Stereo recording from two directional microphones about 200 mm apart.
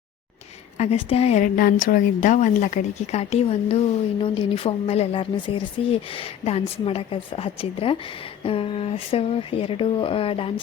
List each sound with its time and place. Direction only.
0.8 s a woman's voice: 30° left (ahead or behind)